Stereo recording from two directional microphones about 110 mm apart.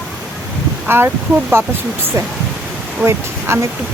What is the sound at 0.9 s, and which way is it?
Speech, 20° right (ahead or behind).